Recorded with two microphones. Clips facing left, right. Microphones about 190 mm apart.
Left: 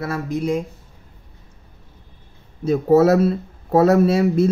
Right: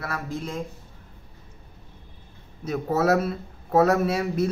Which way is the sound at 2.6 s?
30° left (ahead or behind).